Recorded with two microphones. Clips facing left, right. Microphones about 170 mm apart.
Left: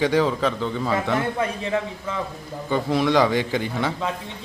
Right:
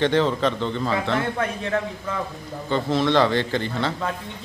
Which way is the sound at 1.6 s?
Centre (ahead or behind).